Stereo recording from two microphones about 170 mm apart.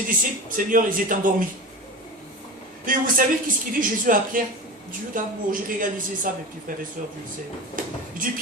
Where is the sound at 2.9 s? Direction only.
55° right (ahead or behind).